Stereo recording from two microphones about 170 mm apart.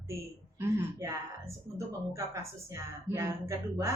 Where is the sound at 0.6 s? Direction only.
20° right (ahead or behind).